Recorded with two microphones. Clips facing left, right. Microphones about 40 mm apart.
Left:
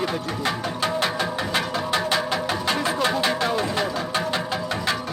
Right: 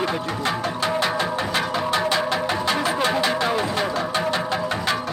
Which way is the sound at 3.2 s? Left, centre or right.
Centre.